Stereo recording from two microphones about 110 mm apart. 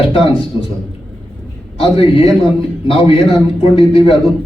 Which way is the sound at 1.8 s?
55° left (ahead or behind).